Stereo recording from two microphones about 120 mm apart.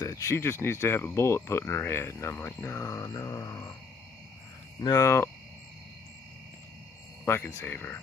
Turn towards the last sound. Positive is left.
turn(degrees=15)  # may be behind; listen again after turning